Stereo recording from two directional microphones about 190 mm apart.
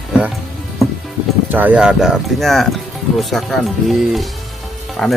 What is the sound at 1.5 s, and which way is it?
Speech, 10° right (ahead or behind).